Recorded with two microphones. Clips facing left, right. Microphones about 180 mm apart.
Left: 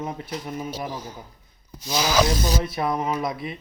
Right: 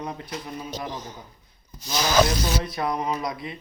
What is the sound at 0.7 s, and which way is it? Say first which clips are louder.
Speech: left 2 dB; 10° left (ahead or behind).